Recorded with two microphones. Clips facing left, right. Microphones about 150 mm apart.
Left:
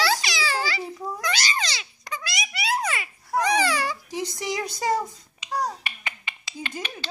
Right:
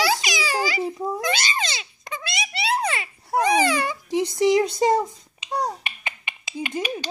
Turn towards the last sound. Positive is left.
turn(degrees=-20)  # may be behind; listen again after turning